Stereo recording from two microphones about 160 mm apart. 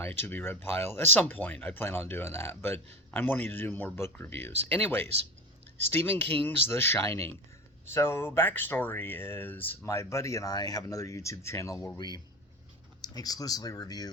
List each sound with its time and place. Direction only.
0.0 s speech: 15° left (ahead or behind)